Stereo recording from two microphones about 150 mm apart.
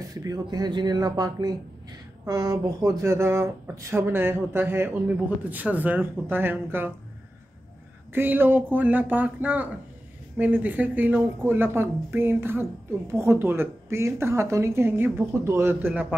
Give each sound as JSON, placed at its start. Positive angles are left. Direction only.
{"t": 0.1, "sound": "speech", "side_deg": -25}
{"t": 8.1, "sound": "speech", "side_deg": -15}